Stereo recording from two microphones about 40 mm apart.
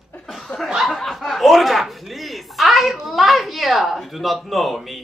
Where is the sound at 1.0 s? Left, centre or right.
Centre.